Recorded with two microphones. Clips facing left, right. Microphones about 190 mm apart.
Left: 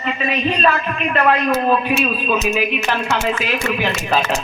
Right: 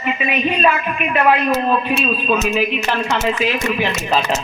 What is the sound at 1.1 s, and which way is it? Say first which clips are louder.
A man's voice: right 1 dB; centre (ahead or behind).